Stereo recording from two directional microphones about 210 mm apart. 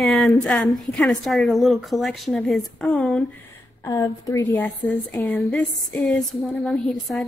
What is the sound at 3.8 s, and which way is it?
A woman's voice, 15° left (ahead or behind).